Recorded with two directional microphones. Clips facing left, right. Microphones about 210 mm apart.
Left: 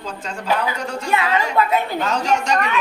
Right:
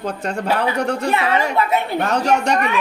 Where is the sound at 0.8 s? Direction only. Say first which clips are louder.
Right 3 dB; 60° right (ahead or behind).